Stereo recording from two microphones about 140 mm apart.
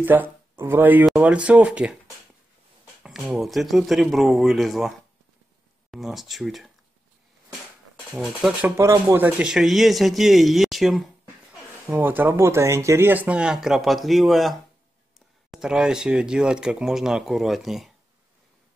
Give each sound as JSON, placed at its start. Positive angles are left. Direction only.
{"t": 0.0, "sound": "speech", "side_deg": -15}
{"t": 3.0, "sound": "a sound", "side_deg": 0}
{"t": 3.3, "sound": "speech", "side_deg": 0}
{"t": 8.1, "sound": "speech", "side_deg": -5}
{"t": 11.9, "sound": "speech", "side_deg": -15}